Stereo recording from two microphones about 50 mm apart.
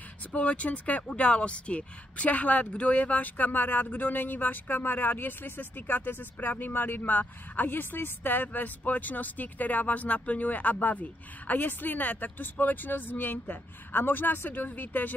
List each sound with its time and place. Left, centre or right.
0.3 s speech: left